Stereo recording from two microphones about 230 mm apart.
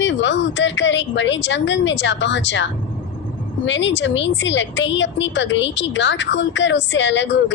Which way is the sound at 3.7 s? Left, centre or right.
Left.